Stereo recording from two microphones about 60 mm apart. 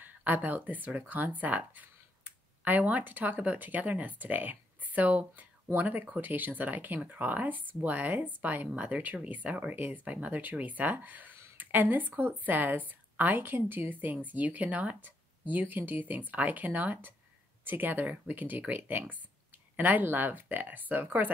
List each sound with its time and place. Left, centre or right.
0.0 s a woman's voice: right
11.5 s a sound: right
12.2 s a woman's voice: right